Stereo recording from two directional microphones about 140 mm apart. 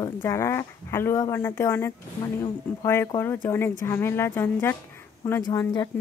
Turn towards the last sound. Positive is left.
turn(degrees=25)  # may be behind; listen again after turning